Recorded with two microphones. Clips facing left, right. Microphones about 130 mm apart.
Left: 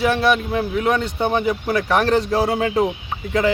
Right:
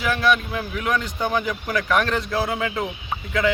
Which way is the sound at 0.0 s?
30° left (ahead or behind).